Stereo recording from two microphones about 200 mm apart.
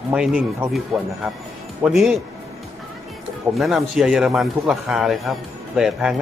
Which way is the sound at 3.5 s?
Centre (ahead or behind).